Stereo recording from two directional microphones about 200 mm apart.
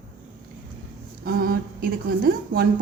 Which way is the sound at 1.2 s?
50° right (ahead or behind).